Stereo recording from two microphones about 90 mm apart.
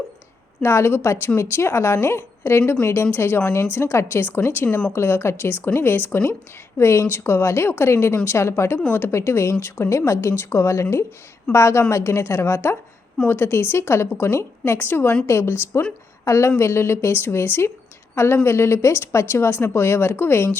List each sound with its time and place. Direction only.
0.6 s a woman's voice: 30° left (ahead or behind)